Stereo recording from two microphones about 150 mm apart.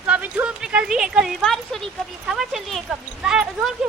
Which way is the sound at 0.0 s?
10° right (ahead or behind).